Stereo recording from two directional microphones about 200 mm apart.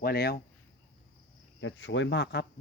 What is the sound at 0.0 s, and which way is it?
Speech, 50° left (ahead or behind).